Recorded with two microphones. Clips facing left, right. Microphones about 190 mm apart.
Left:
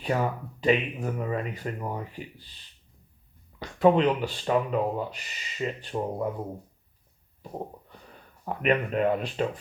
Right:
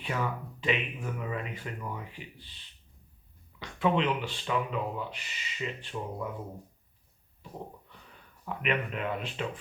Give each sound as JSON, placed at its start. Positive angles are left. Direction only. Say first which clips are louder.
{"t": 0.0, "sound": "speech", "louder": "left 6 dB", "side_deg": 40}
{"t": 7.5, "sound": "speech", "louder": "left 6 dB", "side_deg": 40}